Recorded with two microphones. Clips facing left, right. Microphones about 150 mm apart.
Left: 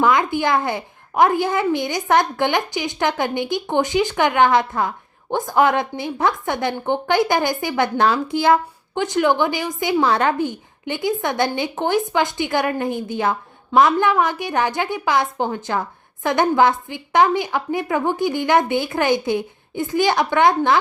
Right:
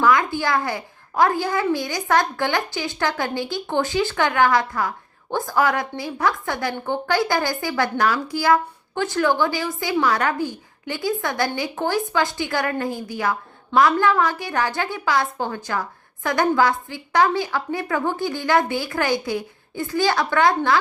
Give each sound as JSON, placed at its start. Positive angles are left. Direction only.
{"t": 0.0, "sound": "a woman's voice", "side_deg": 20}